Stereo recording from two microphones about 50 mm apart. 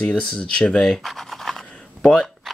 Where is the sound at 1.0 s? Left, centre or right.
Centre.